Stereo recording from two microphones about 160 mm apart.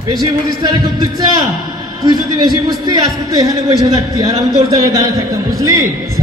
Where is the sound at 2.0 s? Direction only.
25° right (ahead or behind).